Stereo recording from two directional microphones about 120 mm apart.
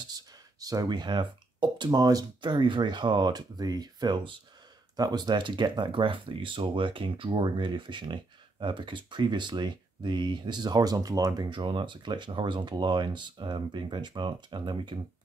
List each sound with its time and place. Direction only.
0.1 s speech: 30° right (ahead or behind)